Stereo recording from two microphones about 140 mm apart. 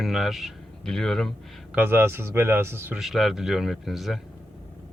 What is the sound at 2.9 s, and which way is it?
Speech, centre (ahead or behind).